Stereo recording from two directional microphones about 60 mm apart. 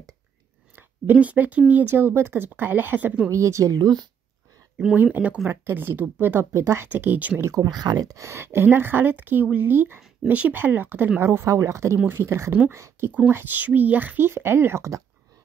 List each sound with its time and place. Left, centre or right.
0.7 s speech: right
3.3 s speech: right
4.9 s speech: right
5.5 s speech: right
6.5 s speech: right
6.9 s speech: right
7.5 s speech: right
8.3 s speech: right
11.1 s speech: right
13.3 s speech: right